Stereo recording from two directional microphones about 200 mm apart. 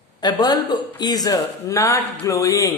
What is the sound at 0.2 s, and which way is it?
A man's voice, 20° left (ahead or behind).